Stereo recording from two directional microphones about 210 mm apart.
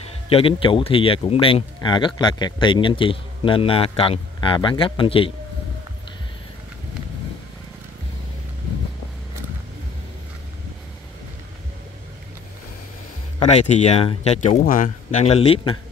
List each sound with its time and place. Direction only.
0.3 s speech: 25° left (ahead or behind)
13.4 s speech: 30° left (ahead or behind)